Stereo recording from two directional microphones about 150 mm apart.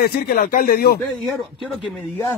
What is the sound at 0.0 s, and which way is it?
Speech, 80° left.